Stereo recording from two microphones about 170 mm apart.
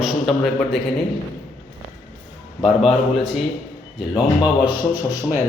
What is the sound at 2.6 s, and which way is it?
Speech, centre (ahead or behind).